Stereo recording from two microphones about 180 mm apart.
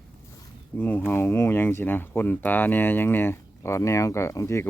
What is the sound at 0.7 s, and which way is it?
Speech, 10° left (ahead or behind).